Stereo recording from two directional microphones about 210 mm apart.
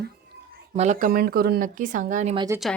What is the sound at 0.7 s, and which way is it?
Speech, 30° right (ahead or behind).